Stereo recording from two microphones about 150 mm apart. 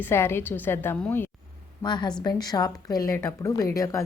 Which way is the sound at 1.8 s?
30° left (ahead or behind).